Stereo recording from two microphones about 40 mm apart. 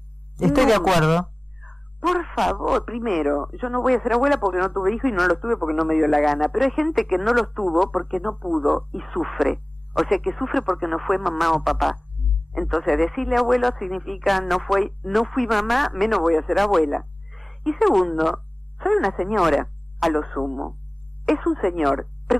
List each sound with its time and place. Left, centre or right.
0.4 s speech: centre
8.3 s speech: right
8.9 s speech: centre